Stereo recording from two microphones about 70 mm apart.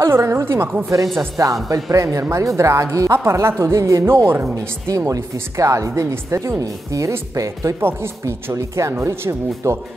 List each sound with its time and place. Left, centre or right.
0.0 s speech: right
1.4 s speech: right
4.8 s speech: right
7.8 s speech: right